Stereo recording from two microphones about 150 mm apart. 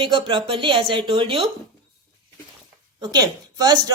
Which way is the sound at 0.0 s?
30° right (ahead or behind).